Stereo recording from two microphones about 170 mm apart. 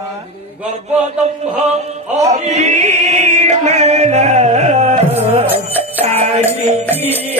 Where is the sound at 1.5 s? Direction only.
40° right (ahead or behind).